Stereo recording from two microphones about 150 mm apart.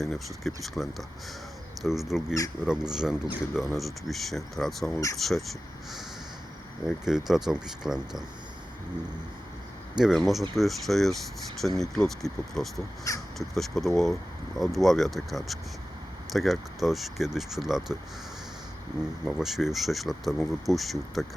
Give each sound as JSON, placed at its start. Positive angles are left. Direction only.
{"t": 0.0, "sound": "speech", "side_deg": 0}
{"t": 10.0, "sound": "speech", "side_deg": 0}
{"t": 13.1, "sound": "speech", "side_deg": 20}
{"t": 13.5, "sound": "speech", "side_deg": 0}
{"t": 19.2, "sound": "speech", "side_deg": -5}